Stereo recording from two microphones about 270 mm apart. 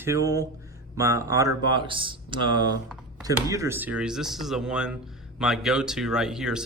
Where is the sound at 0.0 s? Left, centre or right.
Centre.